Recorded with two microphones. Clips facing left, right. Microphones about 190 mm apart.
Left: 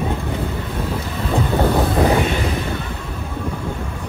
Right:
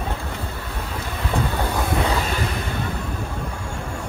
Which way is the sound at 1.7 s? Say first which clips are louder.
Left 5 dB; 25° left (ahead or behind).